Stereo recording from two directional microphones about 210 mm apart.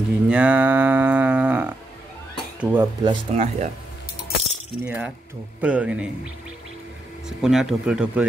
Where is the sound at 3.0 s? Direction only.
20° right (ahead or behind).